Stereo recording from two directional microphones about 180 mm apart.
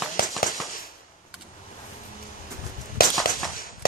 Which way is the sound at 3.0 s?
55° left (ahead or behind).